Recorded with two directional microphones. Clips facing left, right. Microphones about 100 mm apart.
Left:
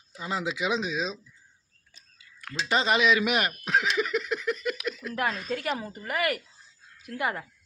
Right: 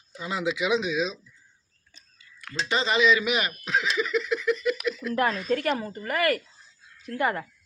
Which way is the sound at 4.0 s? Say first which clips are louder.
Right 2 dB; 50° left (ahead or behind).